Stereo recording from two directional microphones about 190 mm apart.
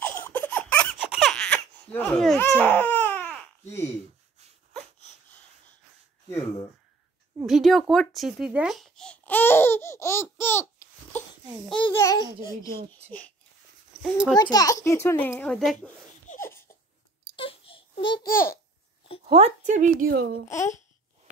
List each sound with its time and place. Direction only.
0.0 s baby laughter: 10° left (ahead or behind)
2.7 s baby cry: 10° left (ahead or behind)
7.3 s speech: centre (ahead or behind); by 10.2 s 15° left (ahead or behind)
10.3 s babbling: 10° left (ahead or behind)
11.9 s a child's voice: 15° left (ahead or behind)
14.0 s speech: 5° right (ahead or behind)
14.3 s a child's voice: 20° left (ahead or behind); by 15.9 s 5° left (ahead or behind)
16.3 s a sound: 10° left (ahead or behind)
17.4 s a sound: 30° left (ahead or behind)
19.2 s a woman's voice: 30° right (ahead or behind); by 20.4 s 50° right (ahead or behind)
20.4 s a child's voice: 15° left (ahead or behind)